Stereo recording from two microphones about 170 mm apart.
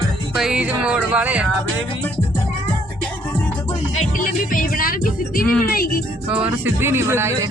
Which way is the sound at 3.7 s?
45° left (ahead or behind).